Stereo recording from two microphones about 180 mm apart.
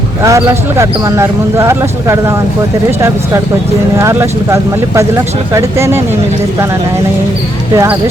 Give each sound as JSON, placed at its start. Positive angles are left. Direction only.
{"t": 0.2, "sound": "speech", "side_deg": -15}
{"t": 3.9, "sound": "speech", "side_deg": -15}
{"t": 7.8, "sound": "speech", "side_deg": -15}